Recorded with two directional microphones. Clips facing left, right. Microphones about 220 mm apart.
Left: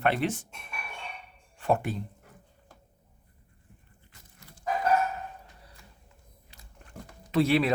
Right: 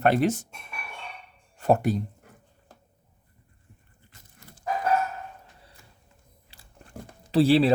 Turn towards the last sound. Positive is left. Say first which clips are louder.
# right 5 dB
turn(degrees=-30)  # may be behind; listen again after turning